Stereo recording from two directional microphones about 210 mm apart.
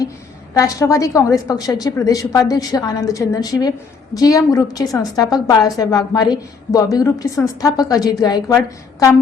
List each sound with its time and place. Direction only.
0.5 s a woman's voice: 15° left (ahead or behind)